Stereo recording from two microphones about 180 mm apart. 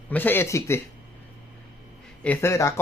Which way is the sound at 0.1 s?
10° left (ahead or behind).